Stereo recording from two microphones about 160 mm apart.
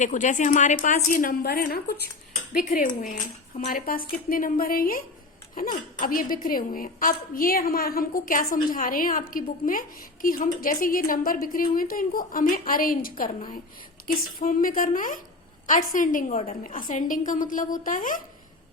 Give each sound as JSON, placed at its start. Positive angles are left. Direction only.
{"t": 0.0, "sound": "a woman's voice", "side_deg": 50}
{"t": 2.5, "sound": "a woman's voice", "side_deg": 55}
{"t": 16.3, "sound": "a woman's voice", "side_deg": 40}